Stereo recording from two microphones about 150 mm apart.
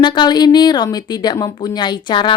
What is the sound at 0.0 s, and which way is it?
Speech, 30° left (ahead or behind).